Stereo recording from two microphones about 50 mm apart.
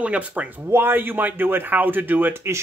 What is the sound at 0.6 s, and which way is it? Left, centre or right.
A man's voice, right.